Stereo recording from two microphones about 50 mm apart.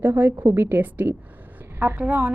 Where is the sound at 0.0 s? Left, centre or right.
Right.